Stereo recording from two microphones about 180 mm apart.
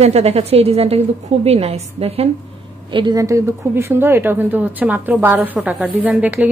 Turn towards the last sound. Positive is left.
turn(degrees=-10)  # may be behind; listen again after turning